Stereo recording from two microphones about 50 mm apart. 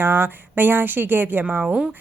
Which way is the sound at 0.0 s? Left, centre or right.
Right.